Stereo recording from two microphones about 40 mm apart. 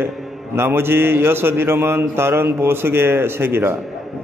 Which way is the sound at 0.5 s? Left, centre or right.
Right.